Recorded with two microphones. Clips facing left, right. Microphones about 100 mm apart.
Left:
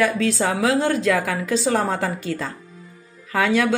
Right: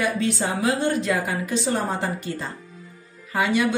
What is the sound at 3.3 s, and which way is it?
Speech, 90° left.